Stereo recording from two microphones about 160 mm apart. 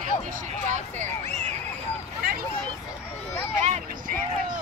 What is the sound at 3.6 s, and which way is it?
Vehicle, 55° right (ahead or behind).